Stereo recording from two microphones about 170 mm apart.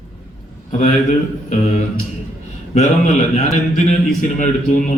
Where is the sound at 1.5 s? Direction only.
45° left (ahead or behind).